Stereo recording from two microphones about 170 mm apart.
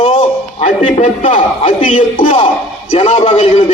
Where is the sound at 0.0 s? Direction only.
40° left (ahead or behind).